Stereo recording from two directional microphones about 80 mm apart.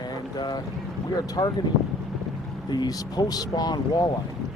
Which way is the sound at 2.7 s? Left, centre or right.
Left.